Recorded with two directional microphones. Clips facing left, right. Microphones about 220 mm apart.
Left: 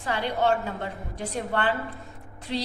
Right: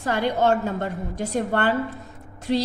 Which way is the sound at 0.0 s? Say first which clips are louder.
Right 4 dB; 45° right (ahead or behind).